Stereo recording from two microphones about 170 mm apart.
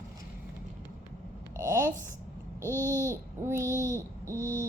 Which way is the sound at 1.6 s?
15° right (ahead or behind).